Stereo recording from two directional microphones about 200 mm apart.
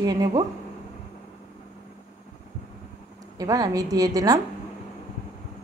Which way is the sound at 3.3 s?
15° right (ahead or behind).